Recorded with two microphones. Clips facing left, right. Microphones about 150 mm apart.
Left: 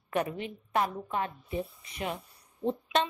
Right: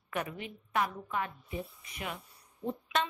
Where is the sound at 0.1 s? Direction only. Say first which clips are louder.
Left 6 dB; 30° left (ahead or behind).